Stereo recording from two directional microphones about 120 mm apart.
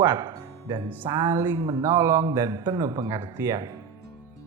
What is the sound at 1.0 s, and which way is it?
Speech, 40° right (ahead or behind).